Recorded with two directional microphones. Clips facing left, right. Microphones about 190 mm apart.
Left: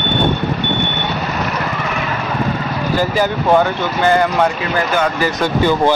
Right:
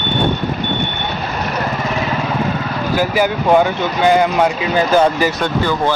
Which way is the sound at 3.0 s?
10° right (ahead or behind).